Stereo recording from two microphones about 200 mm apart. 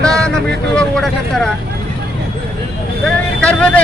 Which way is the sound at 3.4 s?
5° left (ahead or behind).